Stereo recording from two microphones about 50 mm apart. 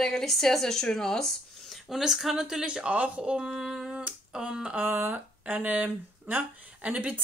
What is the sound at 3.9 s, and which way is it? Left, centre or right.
Finger snapping, centre.